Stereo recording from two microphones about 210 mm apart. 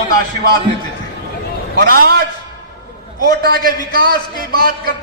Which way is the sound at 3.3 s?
45° right (ahead or behind).